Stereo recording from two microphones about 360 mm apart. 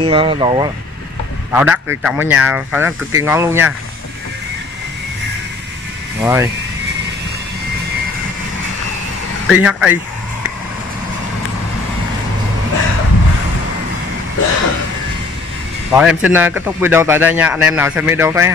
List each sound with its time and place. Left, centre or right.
0.0 s a man's voice: centre
6.2 s speech: centre
9.5 s a man's voice: centre
15.9 s a man's voice: centre